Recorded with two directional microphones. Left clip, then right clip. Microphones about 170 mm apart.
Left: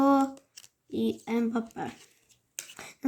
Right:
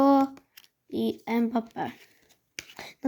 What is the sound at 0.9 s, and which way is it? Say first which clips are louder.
A woman's voice: right 2 dB; 25° right (ahead or behind).